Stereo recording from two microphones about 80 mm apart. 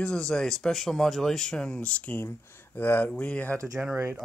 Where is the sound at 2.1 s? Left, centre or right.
Left.